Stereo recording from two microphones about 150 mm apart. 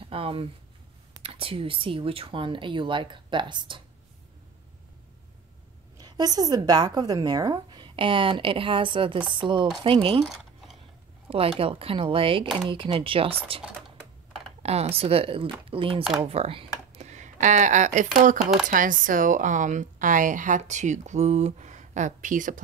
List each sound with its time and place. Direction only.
0.0 s a woman's voice: 35° right (ahead or behind)
5.9 s a woman's voice: 25° right (ahead or behind)
10.2 s a sound: centre (ahead or behind)
11.2 s a woman's voice: 40° right (ahead or behind)
14.6 s a woman's voice: 45° right (ahead or behind)
17.0 s speech: 55° right (ahead or behind)
18.4 s speech: 5° right (ahead or behind)
18.7 s speech: 65° right (ahead or behind)